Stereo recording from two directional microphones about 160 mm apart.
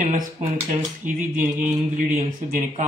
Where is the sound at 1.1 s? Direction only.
55° right (ahead or behind).